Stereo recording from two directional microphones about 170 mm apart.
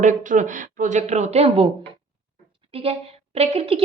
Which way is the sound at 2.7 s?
35° right (ahead or behind).